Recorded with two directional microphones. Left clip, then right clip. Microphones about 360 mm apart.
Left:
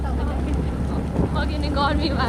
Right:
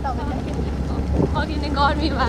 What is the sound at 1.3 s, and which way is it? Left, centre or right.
Speech, centre.